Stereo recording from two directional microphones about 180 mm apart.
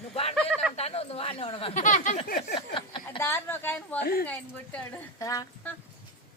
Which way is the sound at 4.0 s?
55° left (ahead or behind).